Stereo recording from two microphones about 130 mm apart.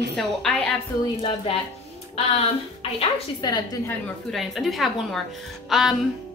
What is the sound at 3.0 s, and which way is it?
Speech, 35° left (ahead or behind).